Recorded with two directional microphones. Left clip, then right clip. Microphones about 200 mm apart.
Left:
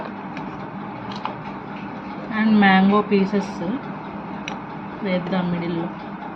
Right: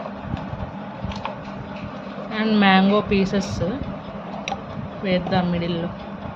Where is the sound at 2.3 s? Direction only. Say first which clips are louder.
Left 1 dB; 60° right (ahead or behind).